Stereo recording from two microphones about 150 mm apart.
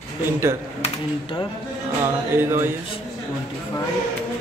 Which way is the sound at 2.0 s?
15° right (ahead or behind).